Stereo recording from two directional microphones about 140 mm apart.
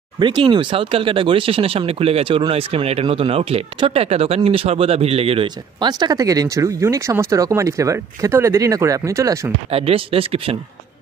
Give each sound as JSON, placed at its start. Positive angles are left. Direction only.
{"t": 0.2, "sound": "speech", "side_deg": -35}
{"t": 9.7, "sound": "speech", "side_deg": -45}